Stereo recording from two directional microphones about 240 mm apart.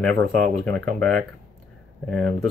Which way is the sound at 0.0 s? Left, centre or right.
Centre.